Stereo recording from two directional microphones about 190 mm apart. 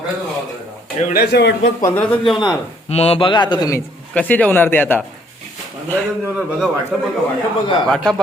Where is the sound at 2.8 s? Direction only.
35° left (ahead or behind).